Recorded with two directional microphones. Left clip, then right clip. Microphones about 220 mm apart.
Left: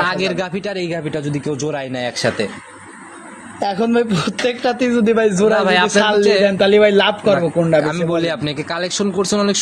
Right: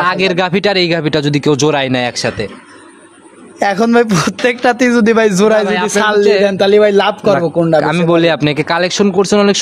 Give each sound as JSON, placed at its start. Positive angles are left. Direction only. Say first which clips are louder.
{"t": 0.0, "sound": "speech", "louder": "right 6 dB", "side_deg": -35}
{"t": 3.5, "sound": "speech", "louder": "right 6 dB", "side_deg": -55}
{"t": 5.9, "sound": "speech", "louder": "right 3 dB", "side_deg": -40}
{"t": 6.2, "sound": "a man's voice", "louder": "right 3 dB", "side_deg": -25}